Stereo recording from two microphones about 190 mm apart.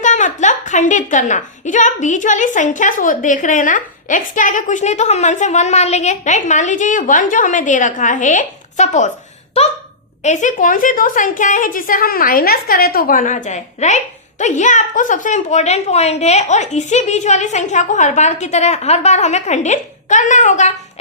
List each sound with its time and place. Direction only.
0.0 s a woman's voice: 40° left (ahead or behind)
10.2 s a woman's voice: 40° left (ahead or behind)